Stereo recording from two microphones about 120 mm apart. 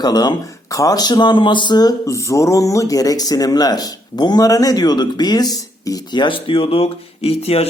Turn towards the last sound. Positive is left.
turn(degrees=55)  # may be behind; listen again after turning